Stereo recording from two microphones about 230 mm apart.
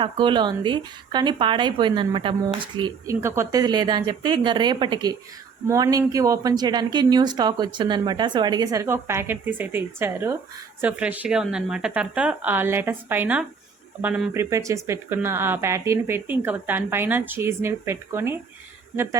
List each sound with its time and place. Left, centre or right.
0.0 s a woman's voice: right